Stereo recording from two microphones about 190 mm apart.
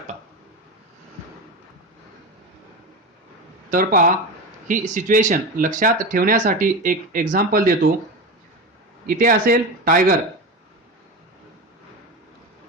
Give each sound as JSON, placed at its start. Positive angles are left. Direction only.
{"t": 3.7, "sound": "speech", "side_deg": -45}
{"t": 9.0, "sound": "speech", "side_deg": -50}